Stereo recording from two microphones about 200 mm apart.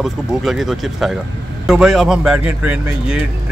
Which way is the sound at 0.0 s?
Centre (ahead or behind).